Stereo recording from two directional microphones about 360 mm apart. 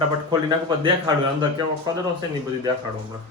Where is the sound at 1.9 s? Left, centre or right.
Centre.